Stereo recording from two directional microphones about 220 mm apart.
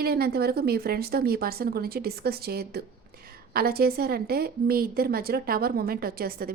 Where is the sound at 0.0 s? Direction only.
45° right (ahead or behind).